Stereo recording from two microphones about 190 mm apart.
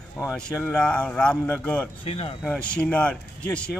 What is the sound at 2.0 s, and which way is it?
Speech, 30° left (ahead or behind).